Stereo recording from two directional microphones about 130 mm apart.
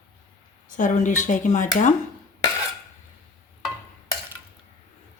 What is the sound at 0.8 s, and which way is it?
Speech, 70° left (ahead or behind).